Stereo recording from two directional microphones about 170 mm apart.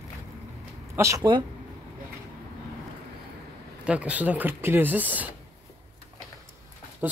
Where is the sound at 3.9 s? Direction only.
10° right (ahead or behind).